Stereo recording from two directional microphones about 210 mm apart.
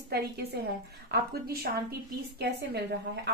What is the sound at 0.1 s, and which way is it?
A woman's voice, 50° right (ahead or behind).